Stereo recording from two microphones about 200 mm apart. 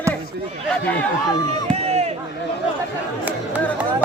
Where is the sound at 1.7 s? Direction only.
30° right (ahead or behind).